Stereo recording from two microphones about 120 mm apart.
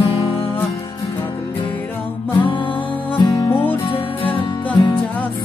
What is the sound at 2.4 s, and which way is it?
Music, 45° left (ahead or behind).